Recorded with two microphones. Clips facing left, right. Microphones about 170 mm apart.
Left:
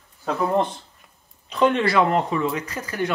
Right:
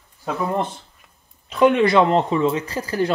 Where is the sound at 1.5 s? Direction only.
10° right (ahead or behind); by 3.0 s 30° right (ahead or behind).